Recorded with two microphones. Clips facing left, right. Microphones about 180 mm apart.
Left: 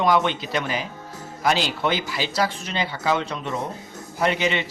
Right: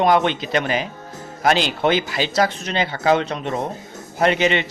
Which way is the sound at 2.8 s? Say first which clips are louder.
Right 6 dB; 65° right (ahead or behind).